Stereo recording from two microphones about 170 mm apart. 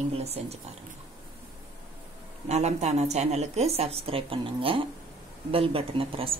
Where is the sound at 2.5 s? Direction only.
40° right (ahead or behind).